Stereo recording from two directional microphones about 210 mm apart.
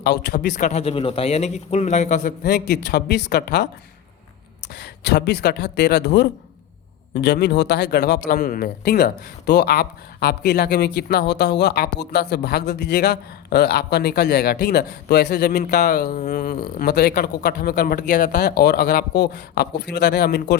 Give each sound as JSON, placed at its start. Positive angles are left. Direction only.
{"t": 0.0, "sound": "speech", "side_deg": 50}
{"t": 0.6, "sound": "a man's voice", "side_deg": 30}
{"t": 2.4, "sound": "speech", "side_deg": 50}
{"t": 4.7, "sound": "speech", "side_deg": 55}
{"t": 16.0, "sound": "speech", "side_deg": 35}